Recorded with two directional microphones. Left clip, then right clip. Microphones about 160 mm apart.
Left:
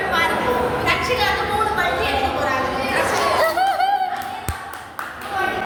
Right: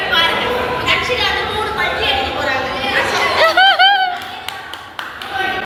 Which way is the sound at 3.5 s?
Centre (ahead or behind).